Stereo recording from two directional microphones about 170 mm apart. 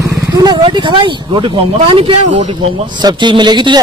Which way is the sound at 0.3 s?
25° right (ahead or behind).